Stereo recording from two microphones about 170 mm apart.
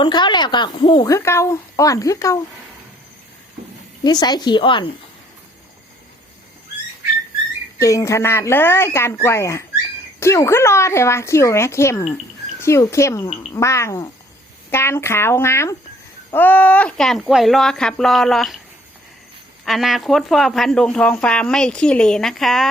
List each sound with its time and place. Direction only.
0.0 s a woman's voice: 25° left (ahead or behind)
4.0 s a woman's voice: 25° left (ahead or behind)
7.8 s speech: 20° left (ahead or behind); by 18.5 s centre (ahead or behind)
19.6 s speech: centre (ahead or behind)